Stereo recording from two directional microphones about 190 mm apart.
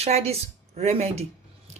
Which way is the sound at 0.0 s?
35° right (ahead or behind).